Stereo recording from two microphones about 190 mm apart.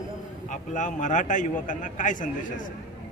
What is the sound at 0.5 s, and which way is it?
A man's voice, 40° left (ahead or behind).